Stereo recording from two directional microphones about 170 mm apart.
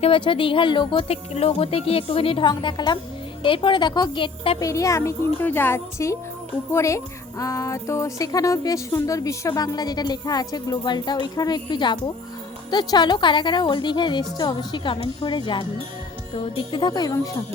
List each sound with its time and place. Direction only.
0.0 s speech: 30° left (ahead or behind)
4.7 s a child's voice: 20° left (ahead or behind)